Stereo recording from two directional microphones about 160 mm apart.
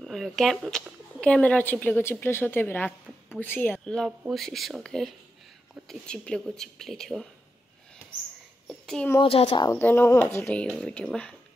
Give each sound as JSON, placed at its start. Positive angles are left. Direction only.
{"t": 0.0, "sound": "speech", "side_deg": 0}
{"t": 8.6, "sound": "a sound", "side_deg": 5}
{"t": 9.2, "sound": "speech", "side_deg": 35}
{"t": 9.7, "sound": "speech", "side_deg": 15}